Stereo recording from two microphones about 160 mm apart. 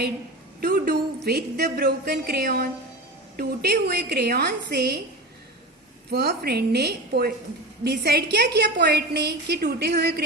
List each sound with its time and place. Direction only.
0.6 s a woman's voice: 70° right (ahead or behind); by 4.9 s 90° right
6.1 s a woman's voice: 80° right